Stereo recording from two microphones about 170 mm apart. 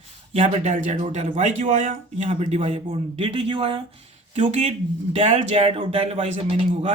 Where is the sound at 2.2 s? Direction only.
35° right (ahead or behind).